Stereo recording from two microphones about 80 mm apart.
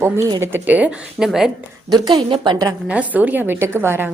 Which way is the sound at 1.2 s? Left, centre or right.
Centre.